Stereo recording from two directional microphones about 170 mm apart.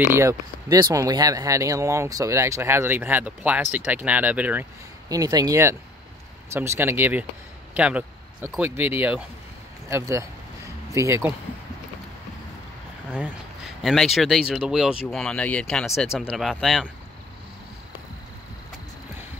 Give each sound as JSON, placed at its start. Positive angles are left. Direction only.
{"t": 0.0, "sound": "speech", "side_deg": -15}
{"t": 5.1, "sound": "speech", "side_deg": -20}
{"t": 13.8, "sound": "speech", "side_deg": 0}